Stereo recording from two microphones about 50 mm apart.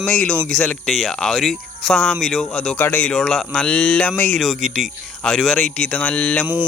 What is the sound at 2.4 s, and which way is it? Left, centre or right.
Speech, centre.